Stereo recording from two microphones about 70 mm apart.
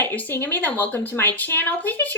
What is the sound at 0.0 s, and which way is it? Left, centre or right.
Speech, left.